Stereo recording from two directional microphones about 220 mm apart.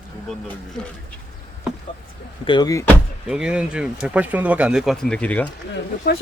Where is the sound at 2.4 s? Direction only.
20° left (ahead or behind).